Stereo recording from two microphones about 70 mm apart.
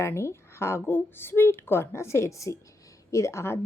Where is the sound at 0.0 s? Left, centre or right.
Left.